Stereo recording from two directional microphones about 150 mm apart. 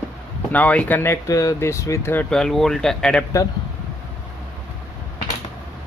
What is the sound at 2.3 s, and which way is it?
Speech, 5° left (ahead or behind).